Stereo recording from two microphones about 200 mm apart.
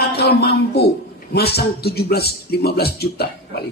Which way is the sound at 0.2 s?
50° left (ahead or behind).